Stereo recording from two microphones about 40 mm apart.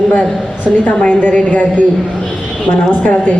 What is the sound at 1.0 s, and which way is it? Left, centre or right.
Speech, left.